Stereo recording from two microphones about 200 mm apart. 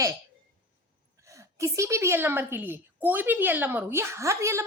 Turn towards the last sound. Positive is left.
turn(degrees=-15)  # may be behind; listen again after turning